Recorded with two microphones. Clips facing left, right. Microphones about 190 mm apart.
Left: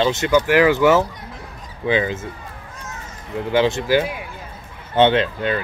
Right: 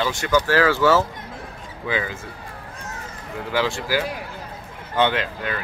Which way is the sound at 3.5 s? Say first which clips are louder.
Left 6 dB; 20° left (ahead or behind).